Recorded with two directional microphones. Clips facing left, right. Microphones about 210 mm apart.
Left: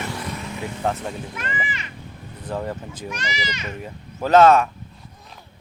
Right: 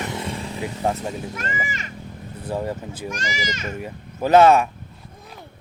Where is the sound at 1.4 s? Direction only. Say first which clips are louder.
Right 1 dB; 45° right (ahead or behind).